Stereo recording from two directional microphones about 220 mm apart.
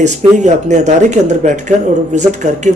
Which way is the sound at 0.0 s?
30° right (ahead or behind).